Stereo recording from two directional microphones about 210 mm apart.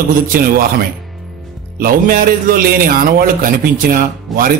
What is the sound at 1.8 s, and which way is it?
A man's voice, 45° right (ahead or behind).